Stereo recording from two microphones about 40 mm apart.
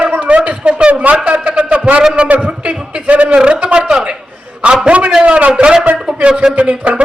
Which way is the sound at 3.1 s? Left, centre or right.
Right.